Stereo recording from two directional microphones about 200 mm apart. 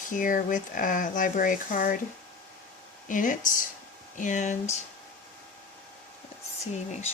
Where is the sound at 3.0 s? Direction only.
40° left (ahead or behind).